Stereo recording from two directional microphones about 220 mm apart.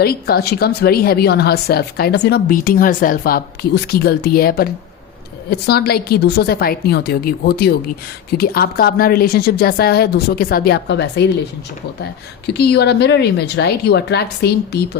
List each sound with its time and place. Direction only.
0.0 s a woman's voice: 45° left (ahead or behind)
12.5 s a woman's voice: 50° left (ahead or behind)